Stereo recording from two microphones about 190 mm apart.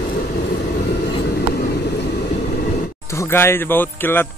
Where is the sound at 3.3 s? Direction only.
10° left (ahead or behind).